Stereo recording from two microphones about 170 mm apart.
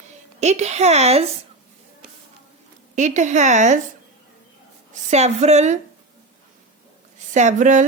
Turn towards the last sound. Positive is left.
turn(degrees=-45)  # may be behind; listen again after turning